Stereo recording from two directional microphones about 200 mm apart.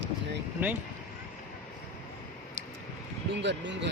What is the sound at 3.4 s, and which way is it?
Speech, 60° right (ahead or behind).